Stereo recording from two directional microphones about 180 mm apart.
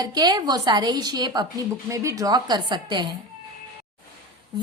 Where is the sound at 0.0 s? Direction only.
20° right (ahead or behind).